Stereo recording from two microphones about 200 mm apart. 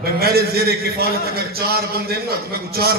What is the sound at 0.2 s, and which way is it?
A man's voice, 50° right (ahead or behind).